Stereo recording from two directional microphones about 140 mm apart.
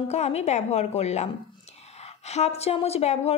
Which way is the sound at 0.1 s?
50° left (ahead or behind).